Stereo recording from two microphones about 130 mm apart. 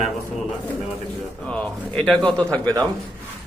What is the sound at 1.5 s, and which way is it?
Speech, 10° left (ahead or behind).